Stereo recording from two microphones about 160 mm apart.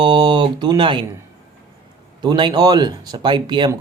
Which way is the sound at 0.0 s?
30° right (ahead or behind).